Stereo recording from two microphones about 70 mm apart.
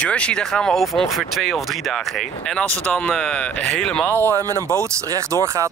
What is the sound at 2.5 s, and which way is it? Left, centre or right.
Speech, centre.